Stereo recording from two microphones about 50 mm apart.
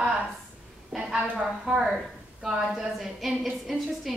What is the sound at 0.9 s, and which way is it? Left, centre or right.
Speech, right.